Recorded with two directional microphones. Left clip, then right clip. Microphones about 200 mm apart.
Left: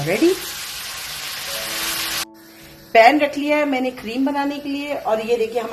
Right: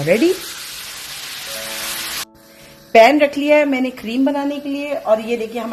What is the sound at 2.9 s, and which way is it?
A woman's voice, 45° right (ahead or behind).